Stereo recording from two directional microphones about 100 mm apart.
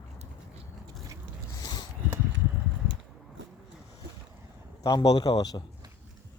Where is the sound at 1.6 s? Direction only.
45° left (ahead or behind).